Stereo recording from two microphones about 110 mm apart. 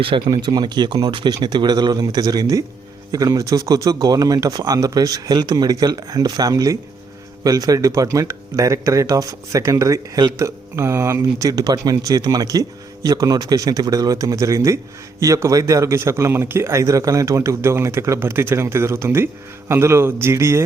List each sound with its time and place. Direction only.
0.3 s a man's voice: 40° right (ahead or behind)